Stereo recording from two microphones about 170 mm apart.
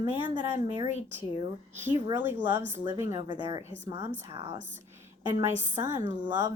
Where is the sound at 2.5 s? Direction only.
15° right (ahead or behind).